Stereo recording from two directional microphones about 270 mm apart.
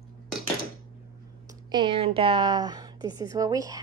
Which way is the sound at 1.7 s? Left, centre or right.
Centre.